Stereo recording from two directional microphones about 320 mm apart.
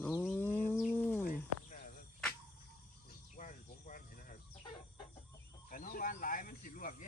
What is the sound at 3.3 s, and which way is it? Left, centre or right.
Cricket, left.